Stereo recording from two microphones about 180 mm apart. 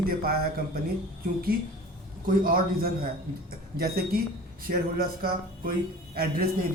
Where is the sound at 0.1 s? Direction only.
55° right (ahead or behind).